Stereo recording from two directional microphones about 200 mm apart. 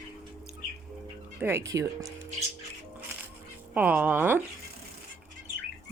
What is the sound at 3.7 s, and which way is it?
Speech, 5° right (ahead or behind).